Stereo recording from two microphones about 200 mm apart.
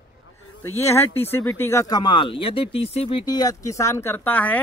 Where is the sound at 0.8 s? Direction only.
15° left (ahead or behind).